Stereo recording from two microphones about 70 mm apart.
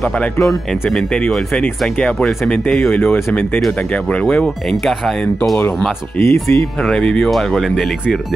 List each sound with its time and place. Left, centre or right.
0.4 s speech: centre
4.2 s speech: centre
6.1 s speech: left
6.6 s speech: centre